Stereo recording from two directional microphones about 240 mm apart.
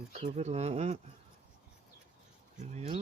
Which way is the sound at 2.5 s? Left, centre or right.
Right.